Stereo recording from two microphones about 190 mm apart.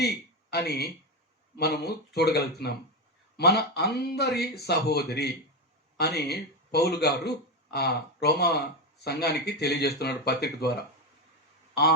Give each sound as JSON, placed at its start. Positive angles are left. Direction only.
{"t": 0.5, "sound": "speech", "side_deg": 55}